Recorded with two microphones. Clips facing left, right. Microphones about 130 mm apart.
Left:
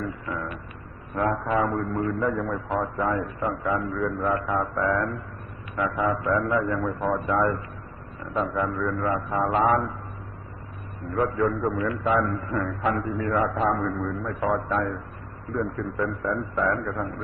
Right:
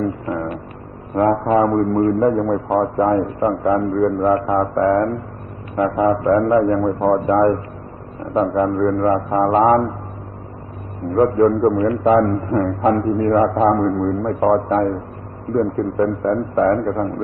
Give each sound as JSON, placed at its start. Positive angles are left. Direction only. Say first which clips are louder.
{"t": 0.0, "sound": "a sound", "louder": "right 10 dB", "side_deg": -40}
{"t": 1.1, "sound": "a man's voice", "louder": "right 9 dB", "side_deg": -40}
{"t": 11.1, "sound": "a man's voice", "louder": "right 10 dB", "side_deg": -40}